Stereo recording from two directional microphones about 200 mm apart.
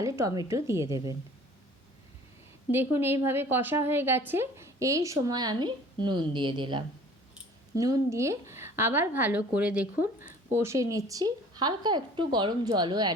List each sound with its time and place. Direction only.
0.0 s a woman's voice: 15° right (ahead or behind)
2.7 s a woman's voice: 10° right (ahead or behind)